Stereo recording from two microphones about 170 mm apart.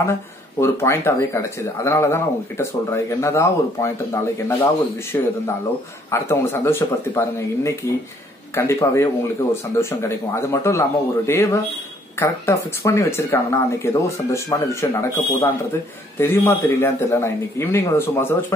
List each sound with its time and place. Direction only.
0.0 s speech: 15° left (ahead or behind)